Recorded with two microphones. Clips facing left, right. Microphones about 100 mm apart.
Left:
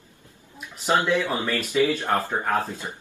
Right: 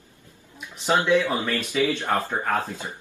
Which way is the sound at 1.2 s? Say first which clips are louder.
Right 1 dB; 20° left (ahead or behind).